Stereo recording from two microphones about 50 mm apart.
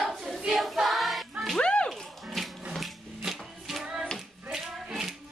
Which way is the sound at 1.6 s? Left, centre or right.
Left.